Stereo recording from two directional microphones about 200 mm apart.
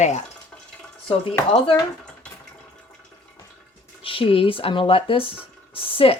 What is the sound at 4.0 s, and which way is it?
Speech, 25° left (ahead or behind).